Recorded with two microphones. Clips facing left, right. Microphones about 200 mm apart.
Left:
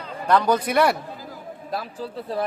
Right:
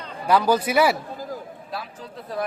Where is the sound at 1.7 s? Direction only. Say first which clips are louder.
Left 5 dB; 40° left (ahead or behind).